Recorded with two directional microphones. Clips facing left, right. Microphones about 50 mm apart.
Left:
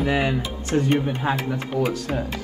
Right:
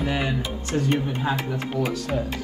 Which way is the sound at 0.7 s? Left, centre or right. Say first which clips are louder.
Left 3 dB; left.